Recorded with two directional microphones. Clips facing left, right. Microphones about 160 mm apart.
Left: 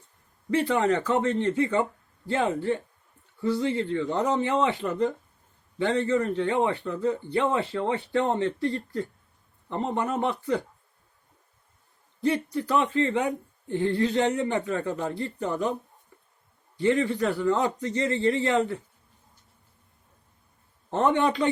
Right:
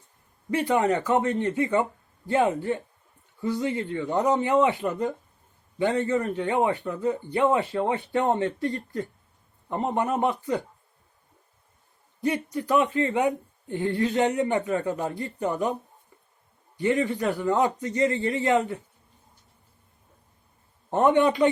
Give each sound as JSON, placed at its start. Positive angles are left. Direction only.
{"t": 0.5, "sound": "speech", "side_deg": -15}
{"t": 12.2, "sound": "speech", "side_deg": -15}
{"t": 16.7, "sound": "speech", "side_deg": -15}
{"t": 20.9, "sound": "speech", "side_deg": -15}